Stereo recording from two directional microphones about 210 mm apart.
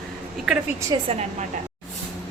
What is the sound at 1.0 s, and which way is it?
Speech, 30° right (ahead or behind).